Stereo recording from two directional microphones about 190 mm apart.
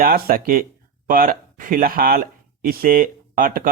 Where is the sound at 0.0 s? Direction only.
50° right (ahead or behind).